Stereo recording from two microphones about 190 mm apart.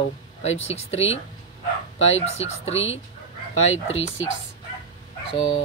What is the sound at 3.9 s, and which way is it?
Speech, 90° left.